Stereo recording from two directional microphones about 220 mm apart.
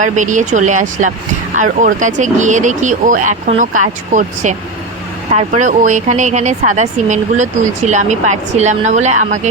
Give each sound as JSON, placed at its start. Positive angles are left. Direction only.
{"t": 0.2, "sound": "speech", "side_deg": -35}